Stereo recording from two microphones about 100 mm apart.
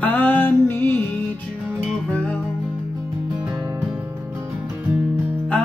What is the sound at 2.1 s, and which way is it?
Music, 10° left (ahead or behind).